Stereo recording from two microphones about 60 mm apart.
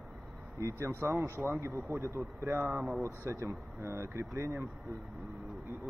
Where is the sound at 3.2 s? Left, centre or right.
Right.